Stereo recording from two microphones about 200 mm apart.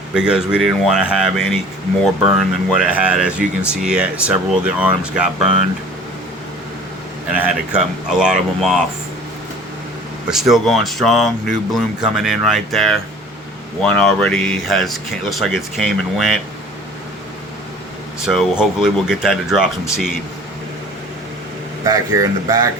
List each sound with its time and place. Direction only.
0.1 s speech: 5° right (ahead or behind)
7.3 s speech: 5° right (ahead or behind)
10.2 s speech: centre (ahead or behind)
18.3 s speech: centre (ahead or behind)
21.8 s speech: 20° right (ahead or behind)